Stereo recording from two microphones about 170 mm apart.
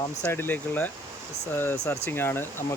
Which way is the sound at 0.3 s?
10° left (ahead or behind).